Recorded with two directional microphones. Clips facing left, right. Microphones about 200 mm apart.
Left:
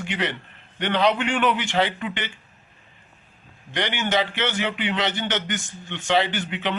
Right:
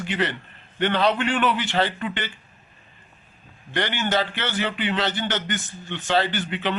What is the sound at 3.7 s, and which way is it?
A man's voice, 15° left (ahead or behind).